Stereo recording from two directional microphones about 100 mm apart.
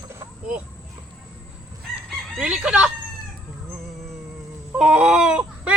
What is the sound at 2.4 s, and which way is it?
Chicken, 10° right (ahead or behind).